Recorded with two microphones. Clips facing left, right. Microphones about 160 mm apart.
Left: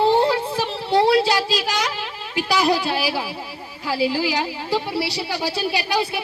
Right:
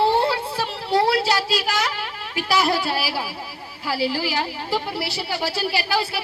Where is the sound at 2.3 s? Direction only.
20° left (ahead or behind).